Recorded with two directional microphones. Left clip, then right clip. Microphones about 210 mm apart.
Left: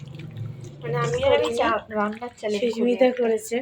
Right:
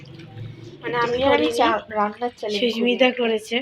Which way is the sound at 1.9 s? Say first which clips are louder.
Right 4 dB; 40° right (ahead or behind).